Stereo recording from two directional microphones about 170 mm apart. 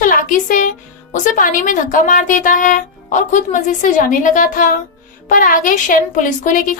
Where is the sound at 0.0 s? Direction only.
50° left (ahead or behind).